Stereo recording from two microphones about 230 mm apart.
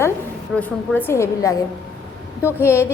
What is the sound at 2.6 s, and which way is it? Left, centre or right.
Speech, centre.